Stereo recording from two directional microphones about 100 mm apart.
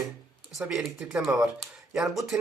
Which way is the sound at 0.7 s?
5° right (ahead or behind).